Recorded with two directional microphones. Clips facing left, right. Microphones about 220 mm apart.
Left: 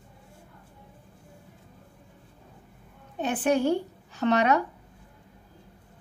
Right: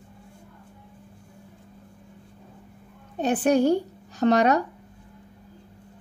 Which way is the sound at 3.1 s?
40° right (ahead or behind).